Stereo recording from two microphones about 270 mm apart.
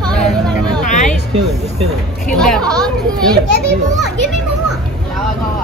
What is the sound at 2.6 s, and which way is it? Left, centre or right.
Speech, centre.